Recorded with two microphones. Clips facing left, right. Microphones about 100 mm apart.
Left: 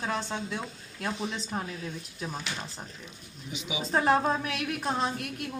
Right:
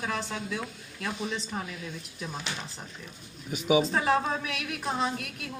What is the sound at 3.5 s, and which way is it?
Speech, 45° right (ahead or behind).